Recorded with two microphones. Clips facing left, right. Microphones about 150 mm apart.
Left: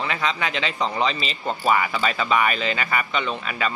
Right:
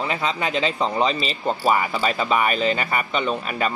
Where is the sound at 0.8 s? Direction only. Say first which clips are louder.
Right 2 dB; 5° right (ahead or behind).